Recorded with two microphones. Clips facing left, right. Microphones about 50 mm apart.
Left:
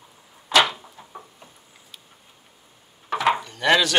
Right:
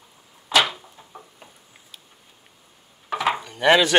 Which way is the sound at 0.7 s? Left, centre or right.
Centre.